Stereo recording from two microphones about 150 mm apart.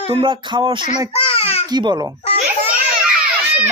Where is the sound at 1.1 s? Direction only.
40° left (ahead or behind).